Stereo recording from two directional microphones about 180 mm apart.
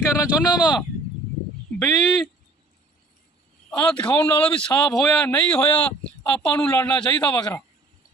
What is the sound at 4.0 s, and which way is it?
Speech, 10° left (ahead or behind).